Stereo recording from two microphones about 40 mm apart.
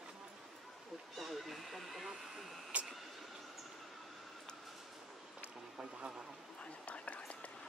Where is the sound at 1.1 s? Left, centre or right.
Centre.